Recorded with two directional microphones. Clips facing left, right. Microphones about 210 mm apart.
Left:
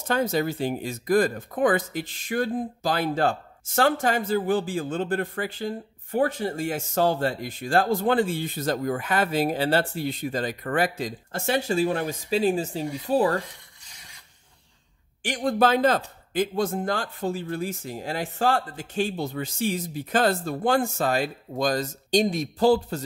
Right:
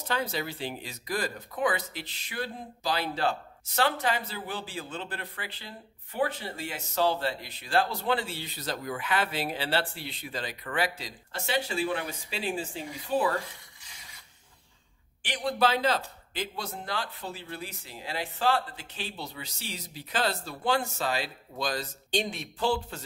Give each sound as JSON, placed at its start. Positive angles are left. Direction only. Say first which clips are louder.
{"t": 0.1, "sound": "speech", "louder": "left 8 dB", "side_deg": 45}
{"t": 15.2, "sound": "speech", "louder": "left 5 dB", "side_deg": 45}